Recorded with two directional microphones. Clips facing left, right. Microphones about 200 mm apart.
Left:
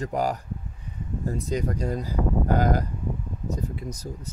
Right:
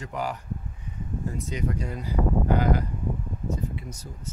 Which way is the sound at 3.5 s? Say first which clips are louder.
Left 2 dB; 40° left (ahead or behind).